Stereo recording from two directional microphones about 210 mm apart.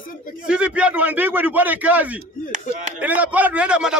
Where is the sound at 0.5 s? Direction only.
5° right (ahead or behind).